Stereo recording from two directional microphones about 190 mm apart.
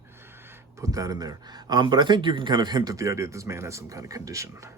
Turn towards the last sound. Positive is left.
turn(degrees=-15)  # may be behind; listen again after turning